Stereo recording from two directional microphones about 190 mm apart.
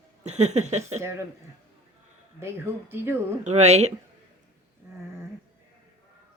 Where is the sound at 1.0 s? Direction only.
15° right (ahead or behind).